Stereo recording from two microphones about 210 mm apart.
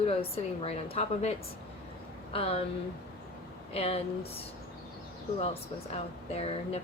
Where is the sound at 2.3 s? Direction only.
25° left (ahead or behind).